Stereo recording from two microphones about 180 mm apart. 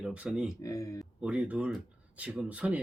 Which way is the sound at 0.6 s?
20° left (ahead or behind).